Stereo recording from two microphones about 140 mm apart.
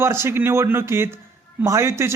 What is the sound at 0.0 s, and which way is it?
Speech, 20° right (ahead or behind).